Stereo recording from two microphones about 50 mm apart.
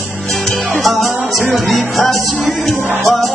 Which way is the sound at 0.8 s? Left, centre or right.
Centre.